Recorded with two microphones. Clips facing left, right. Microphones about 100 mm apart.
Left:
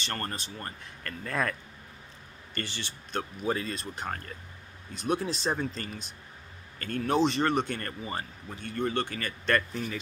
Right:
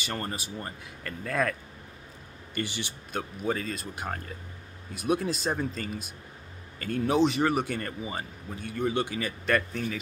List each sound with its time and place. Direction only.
0.0 s speech: 10° right (ahead or behind)
1.2 s speech: centre (ahead or behind)
2.5 s speech: 15° right (ahead or behind)
3.2 s speech: centre (ahead or behind)